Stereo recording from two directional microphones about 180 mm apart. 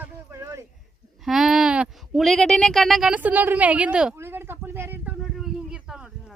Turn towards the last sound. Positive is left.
turn(degrees=-5)  # may be behind; listen again after turning